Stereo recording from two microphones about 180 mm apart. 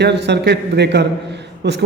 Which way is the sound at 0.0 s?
70° right (ahead or behind).